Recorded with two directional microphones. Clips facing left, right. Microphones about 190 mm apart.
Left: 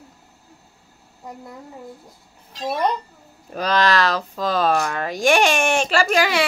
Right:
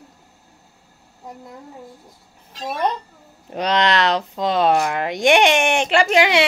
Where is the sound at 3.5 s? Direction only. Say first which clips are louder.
Even; 20° right (ahead or behind).